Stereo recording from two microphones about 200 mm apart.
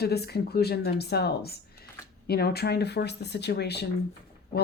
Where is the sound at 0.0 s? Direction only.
55° left (ahead or behind).